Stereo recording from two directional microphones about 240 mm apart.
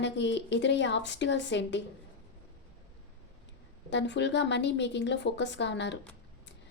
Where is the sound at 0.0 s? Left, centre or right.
Left.